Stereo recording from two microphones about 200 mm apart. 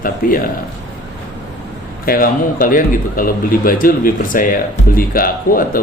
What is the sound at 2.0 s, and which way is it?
Speech, 45° left (ahead or behind).